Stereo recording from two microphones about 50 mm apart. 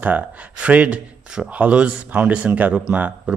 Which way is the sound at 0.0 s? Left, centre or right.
Right.